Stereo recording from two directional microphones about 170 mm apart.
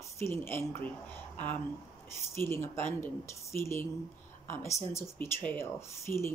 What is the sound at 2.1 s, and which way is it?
Speech, 15° left (ahead or behind).